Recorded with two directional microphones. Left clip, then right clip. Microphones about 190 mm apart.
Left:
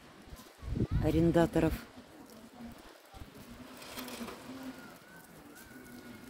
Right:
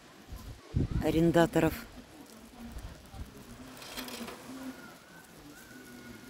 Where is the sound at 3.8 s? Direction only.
55° left (ahead or behind).